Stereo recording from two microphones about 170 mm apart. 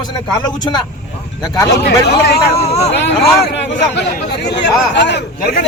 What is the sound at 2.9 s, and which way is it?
Speech, 85° left.